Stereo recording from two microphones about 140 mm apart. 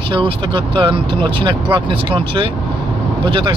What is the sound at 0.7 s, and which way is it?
Speech, 35° right (ahead or behind).